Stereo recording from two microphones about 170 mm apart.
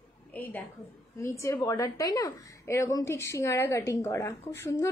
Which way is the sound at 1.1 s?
15° left (ahead or behind).